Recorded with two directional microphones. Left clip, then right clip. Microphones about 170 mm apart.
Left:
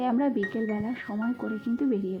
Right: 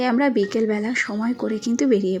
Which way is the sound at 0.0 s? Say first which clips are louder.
Right 7 dB; 20° right (ahead or behind).